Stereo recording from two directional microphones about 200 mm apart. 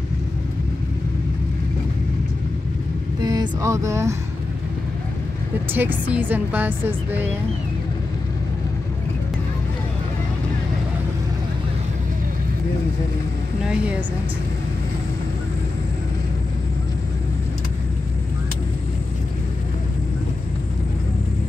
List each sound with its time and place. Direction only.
3.2 s speech: 20° right (ahead or behind)
5.8 s a woman's voice: 10° right (ahead or behind)